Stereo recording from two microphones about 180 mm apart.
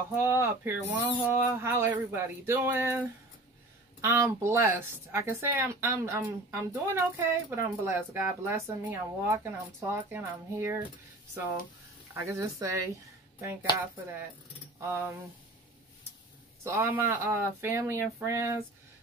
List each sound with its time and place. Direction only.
0.1 s speech: 15° right (ahead or behind)
4.0 s speech: 15° right (ahead or behind)
12.1 s speech: 15° right (ahead or behind)
14.8 s speech: 15° right (ahead or behind)
16.6 s speech: 15° right (ahead or behind)